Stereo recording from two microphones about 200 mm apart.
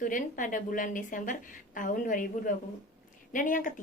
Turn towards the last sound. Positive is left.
turn(degrees=40)  # may be behind; listen again after turning